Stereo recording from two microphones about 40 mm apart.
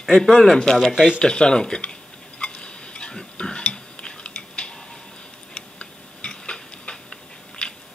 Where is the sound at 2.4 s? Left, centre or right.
Left.